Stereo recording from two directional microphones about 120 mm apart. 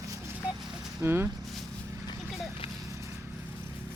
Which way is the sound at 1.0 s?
20° right (ahead or behind).